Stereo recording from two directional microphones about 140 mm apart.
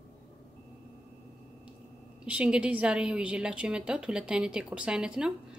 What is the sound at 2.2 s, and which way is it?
A woman's voice, 5° right (ahead or behind).